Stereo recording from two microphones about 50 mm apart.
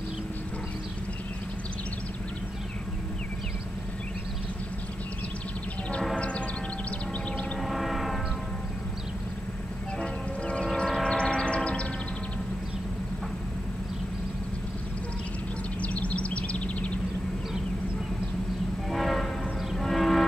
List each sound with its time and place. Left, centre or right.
6.1 s a sound: left
7.6 s vehicle: centre
10.4 s vehicle: left
10.7 s train: centre
15.8 s a sound: left
18.9 s train: centre